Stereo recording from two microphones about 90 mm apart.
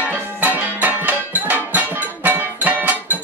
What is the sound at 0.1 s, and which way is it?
Music, 20° right (ahead or behind).